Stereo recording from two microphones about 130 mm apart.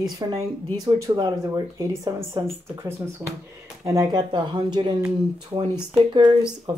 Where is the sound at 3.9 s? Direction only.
30° right (ahead or behind).